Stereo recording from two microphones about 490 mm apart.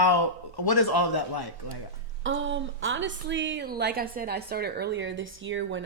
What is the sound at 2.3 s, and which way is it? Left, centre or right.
A woman's voice, right.